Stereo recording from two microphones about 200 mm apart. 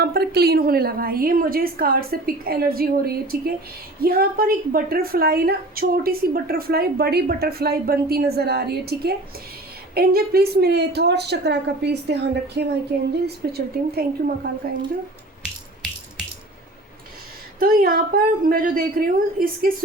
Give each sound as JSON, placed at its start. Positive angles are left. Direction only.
{"t": 0.0, "sound": "a woman's voice", "side_deg": -50}
{"t": 17.6, "sound": "a woman's voice", "side_deg": -45}